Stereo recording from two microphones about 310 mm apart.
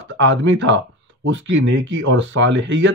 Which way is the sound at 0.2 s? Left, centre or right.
Right.